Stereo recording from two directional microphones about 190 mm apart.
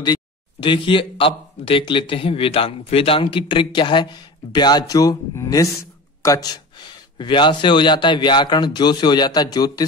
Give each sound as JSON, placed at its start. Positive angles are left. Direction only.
{"t": 0.0, "sound": "speech", "side_deg": 25}